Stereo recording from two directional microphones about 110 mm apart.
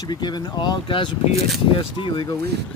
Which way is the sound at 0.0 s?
40° left (ahead or behind).